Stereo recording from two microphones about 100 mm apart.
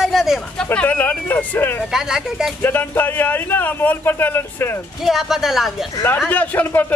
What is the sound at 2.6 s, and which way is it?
Speech, 20° left (ahead or behind).